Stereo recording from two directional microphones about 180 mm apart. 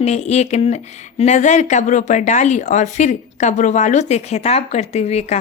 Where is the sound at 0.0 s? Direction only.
40° left (ahead or behind).